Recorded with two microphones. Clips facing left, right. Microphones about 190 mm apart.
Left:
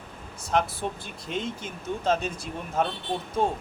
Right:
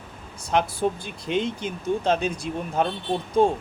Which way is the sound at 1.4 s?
Centre (ahead or behind).